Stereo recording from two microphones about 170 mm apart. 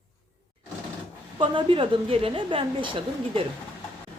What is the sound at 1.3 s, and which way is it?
Speech, 30° right (ahead or behind).